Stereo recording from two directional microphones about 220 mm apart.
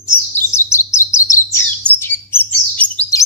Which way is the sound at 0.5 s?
10° left (ahead or behind).